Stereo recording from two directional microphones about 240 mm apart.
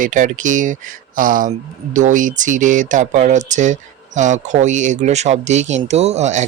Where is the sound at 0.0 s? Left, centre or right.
Right.